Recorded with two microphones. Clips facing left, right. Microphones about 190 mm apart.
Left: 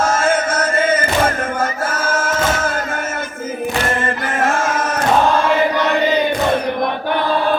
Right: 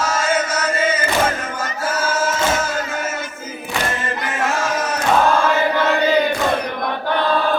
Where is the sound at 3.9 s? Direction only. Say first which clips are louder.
Left 4 dB; 50° left (ahead or behind).